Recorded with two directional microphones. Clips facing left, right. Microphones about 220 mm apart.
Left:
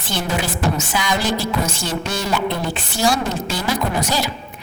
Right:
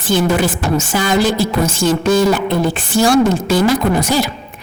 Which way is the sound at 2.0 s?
90° right.